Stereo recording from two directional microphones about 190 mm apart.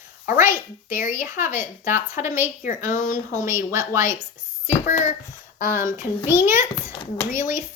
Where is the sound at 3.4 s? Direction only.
15° right (ahead or behind).